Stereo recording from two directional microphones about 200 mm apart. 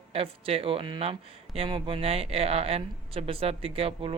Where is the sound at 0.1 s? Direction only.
30° right (ahead or behind).